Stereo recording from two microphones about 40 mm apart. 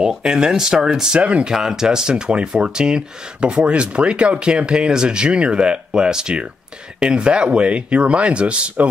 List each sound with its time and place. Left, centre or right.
0.0 s speech: centre
3.5 s speech: right